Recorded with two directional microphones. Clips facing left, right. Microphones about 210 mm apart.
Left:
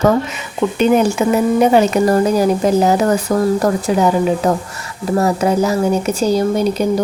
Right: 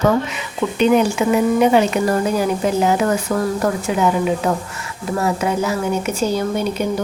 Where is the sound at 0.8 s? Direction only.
40° left (ahead or behind).